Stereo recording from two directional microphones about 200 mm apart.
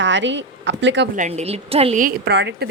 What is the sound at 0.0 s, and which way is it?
Speech, 65° right (ahead or behind).